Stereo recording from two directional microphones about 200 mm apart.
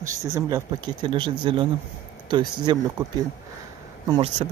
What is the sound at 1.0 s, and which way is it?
Speech, 25° right (ahead or behind).